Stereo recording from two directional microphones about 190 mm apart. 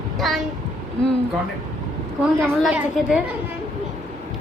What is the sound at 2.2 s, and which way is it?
A woman's voice, 5° right (ahead or behind).